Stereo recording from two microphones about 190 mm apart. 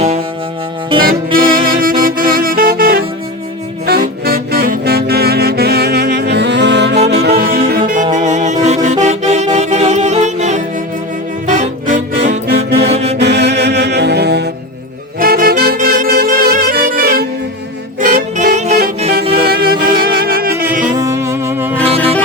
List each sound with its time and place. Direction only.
0.9 s saxophone: 50° right (ahead or behind)
8.1 s music: 40° right (ahead or behind)
12.5 s music: 60° right (ahead or behind)
12.9 s music: 35° right (ahead or behind)
13.1 s music: 60° right (ahead or behind)
15.2 s music: 50° right (ahead or behind)
19.4 s music: 55° right (ahead or behind)
20.9 s music: 15° right (ahead or behind)
21.8 s music: 30° right (ahead or behind)